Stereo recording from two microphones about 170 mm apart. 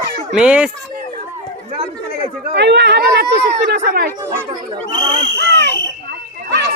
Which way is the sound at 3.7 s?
65° right (ahead or behind).